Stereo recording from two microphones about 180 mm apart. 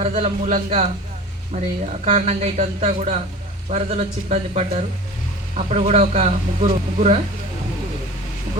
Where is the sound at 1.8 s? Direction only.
40° right (ahead or behind).